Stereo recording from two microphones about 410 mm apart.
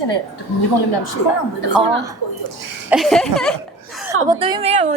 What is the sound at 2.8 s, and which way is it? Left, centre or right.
Speech, centre.